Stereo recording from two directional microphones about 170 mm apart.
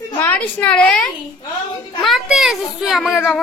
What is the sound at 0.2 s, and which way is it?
A woman's voice, 10° left (ahead or behind).